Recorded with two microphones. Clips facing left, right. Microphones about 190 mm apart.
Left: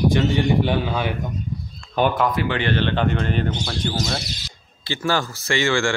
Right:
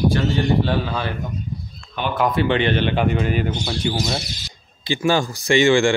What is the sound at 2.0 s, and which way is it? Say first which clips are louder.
Speech: left 6 dB; 40° left (ahead or behind).